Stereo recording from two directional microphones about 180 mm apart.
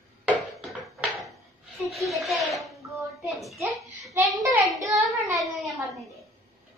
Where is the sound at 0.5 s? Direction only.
Centre (ahead or behind).